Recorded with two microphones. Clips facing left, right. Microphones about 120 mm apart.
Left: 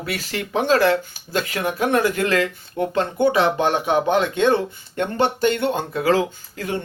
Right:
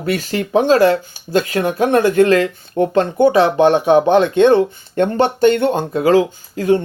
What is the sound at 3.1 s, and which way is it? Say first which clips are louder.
Speech: right 6 dB; 20° right (ahead or behind).